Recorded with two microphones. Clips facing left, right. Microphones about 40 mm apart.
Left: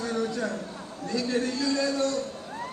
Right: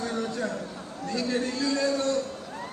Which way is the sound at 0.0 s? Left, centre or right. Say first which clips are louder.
Left 1 dB; right.